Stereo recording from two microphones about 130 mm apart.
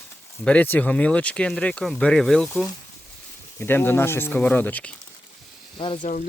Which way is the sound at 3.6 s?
15° left (ahead or behind).